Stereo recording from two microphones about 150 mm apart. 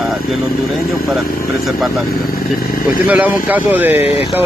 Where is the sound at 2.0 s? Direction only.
75° left (ahead or behind).